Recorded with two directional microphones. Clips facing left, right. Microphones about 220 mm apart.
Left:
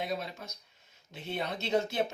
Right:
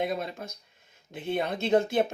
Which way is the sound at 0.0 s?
55° right (ahead or behind).